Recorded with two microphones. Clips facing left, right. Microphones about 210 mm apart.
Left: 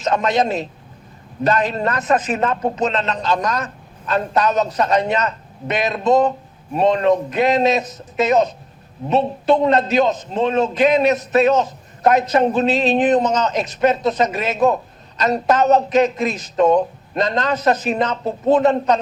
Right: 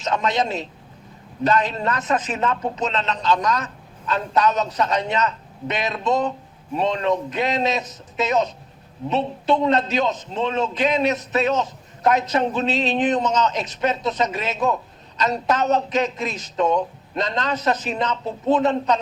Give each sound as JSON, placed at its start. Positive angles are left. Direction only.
{"t": 0.0, "sound": "a man's voice", "side_deg": 50}